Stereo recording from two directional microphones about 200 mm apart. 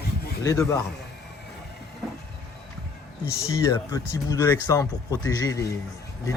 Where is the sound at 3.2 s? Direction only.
15° left (ahead or behind).